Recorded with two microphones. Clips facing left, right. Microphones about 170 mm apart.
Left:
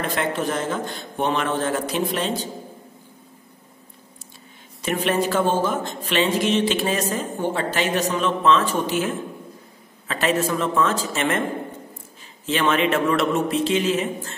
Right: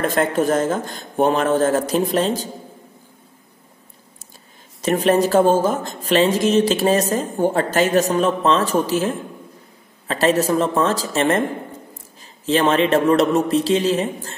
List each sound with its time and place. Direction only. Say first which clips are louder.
0.0 s a man's voice: right 6 dB; 45° right (ahead or behind)
4.8 s speech: right 5 dB; 40° right (ahead or behind)
12.4 s speech: right 4 dB; 35° right (ahead or behind)